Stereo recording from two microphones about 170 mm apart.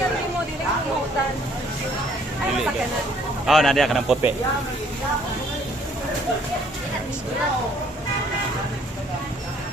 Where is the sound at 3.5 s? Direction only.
Centre (ahead or behind).